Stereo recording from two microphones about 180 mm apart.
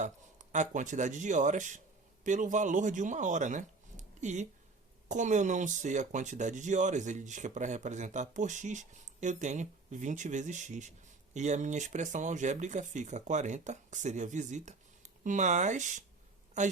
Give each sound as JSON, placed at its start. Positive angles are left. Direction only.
{"t": 0.0, "sound": "speech", "side_deg": -40}